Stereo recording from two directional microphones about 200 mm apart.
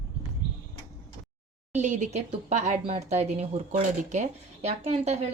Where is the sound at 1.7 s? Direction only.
35° right (ahead or behind).